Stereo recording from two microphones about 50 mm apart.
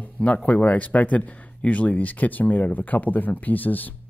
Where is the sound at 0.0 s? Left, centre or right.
Left.